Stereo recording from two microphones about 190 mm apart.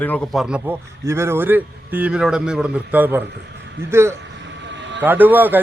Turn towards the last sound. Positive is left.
turn(degrees=-10)  # may be behind; listen again after turning